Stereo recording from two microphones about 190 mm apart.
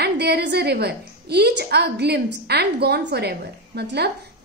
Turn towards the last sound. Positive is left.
turn(degrees=-60)  # may be behind; listen again after turning